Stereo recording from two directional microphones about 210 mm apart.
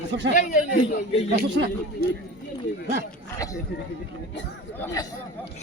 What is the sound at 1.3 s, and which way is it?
Speech, 55° right (ahead or behind).